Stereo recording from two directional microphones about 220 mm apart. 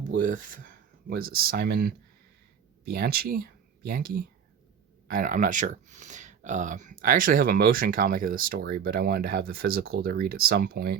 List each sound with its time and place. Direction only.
0.1 s speech: 35° right (ahead or behind)